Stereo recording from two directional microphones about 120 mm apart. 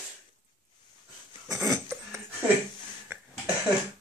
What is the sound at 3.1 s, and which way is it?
Cough, 20° right (ahead or behind).